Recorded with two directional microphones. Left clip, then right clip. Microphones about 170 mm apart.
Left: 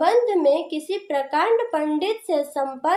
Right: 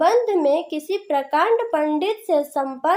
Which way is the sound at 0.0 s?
45° right (ahead or behind).